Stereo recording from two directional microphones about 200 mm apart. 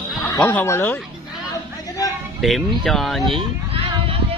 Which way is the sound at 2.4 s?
Centre (ahead or behind).